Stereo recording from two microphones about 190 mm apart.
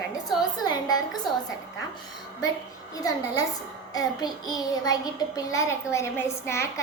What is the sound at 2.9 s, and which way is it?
Speech, 15° left (ahead or behind).